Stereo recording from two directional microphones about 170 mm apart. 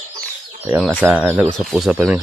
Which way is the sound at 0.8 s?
5° right (ahead or behind).